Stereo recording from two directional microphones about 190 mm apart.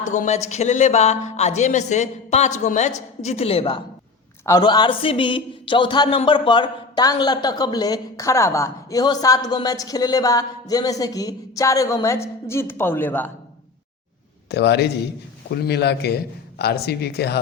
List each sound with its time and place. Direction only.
0.1 s speech: 40° left (ahead or behind)
4.4 s a man's voice: 20° left (ahead or behind)
14.5 s a man's voice: 60° left (ahead or behind)